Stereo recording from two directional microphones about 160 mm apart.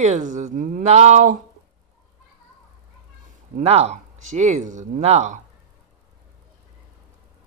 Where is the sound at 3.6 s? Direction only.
40° right (ahead or behind).